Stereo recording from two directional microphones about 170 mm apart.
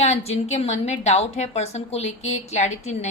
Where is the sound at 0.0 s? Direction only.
40° left (ahead or behind).